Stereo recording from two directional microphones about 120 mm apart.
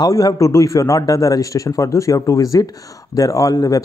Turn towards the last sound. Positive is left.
turn(degrees=30)  # may be behind; listen again after turning